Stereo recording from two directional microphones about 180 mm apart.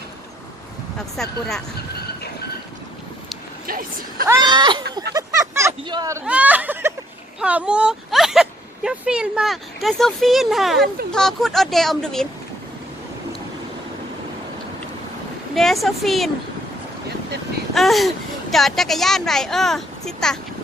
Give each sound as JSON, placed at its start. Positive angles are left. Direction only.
{"t": 0.9, "sound": "speech", "side_deg": 0}
{"t": 3.7, "sound": "speech", "side_deg": -55}
{"t": 4.4, "sound": "speech", "side_deg": -25}
{"t": 5.1, "sound": "a sound", "side_deg": -15}
{"t": 5.8, "sound": "speech", "side_deg": -25}
{"t": 15.5, "sound": "speech", "side_deg": 0}
{"t": 17.7, "sound": "speech", "side_deg": 0}